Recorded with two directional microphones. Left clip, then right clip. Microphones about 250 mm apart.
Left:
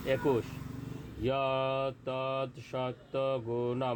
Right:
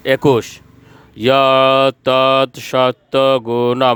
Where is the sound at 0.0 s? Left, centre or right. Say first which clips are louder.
Right 17 dB; right.